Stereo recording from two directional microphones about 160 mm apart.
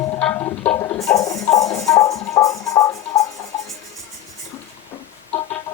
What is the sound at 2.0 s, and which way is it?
Music, 20° left (ahead or behind).